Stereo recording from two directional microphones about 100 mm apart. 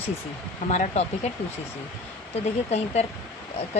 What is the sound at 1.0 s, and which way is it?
Speech, 90° left.